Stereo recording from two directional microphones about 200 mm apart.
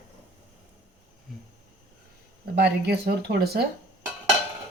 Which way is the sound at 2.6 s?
55° right (ahead or behind).